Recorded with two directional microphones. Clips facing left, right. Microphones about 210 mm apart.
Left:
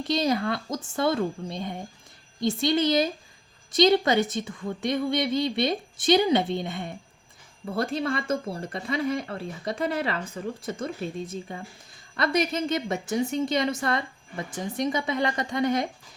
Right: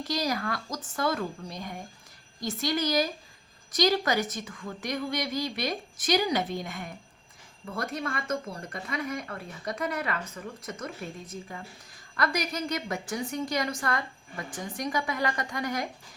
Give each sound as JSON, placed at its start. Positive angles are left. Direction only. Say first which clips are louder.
{"t": 0.1, "sound": "speech", "louder": "left 6 dB", "side_deg": 25}